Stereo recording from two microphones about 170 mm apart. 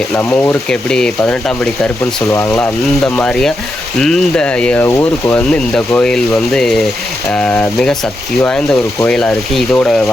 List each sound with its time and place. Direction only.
0.2 s speech: 10° left (ahead or behind)